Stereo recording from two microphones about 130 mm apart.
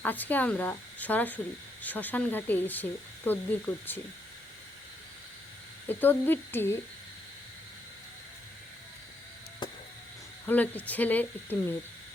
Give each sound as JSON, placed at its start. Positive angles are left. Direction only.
{"t": 0.0, "sound": "speech", "side_deg": 15}
{"t": 5.9, "sound": "speech", "side_deg": 15}
{"t": 9.6, "sound": "a sound", "side_deg": 35}
{"t": 10.4, "sound": "speech", "side_deg": 10}